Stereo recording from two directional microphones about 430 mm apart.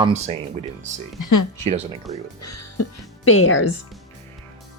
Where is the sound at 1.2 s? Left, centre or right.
Left.